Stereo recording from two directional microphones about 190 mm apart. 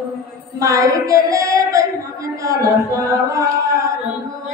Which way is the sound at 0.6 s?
15° right (ahead or behind).